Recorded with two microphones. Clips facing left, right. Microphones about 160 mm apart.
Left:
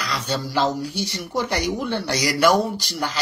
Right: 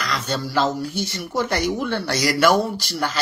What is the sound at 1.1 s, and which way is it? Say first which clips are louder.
A man's voice: right 1 dB; 15° left (ahead or behind).